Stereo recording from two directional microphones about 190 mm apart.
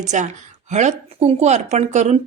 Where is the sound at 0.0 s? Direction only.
40° right (ahead or behind).